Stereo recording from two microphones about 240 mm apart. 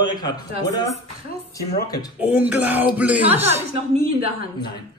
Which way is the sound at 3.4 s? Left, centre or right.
Right.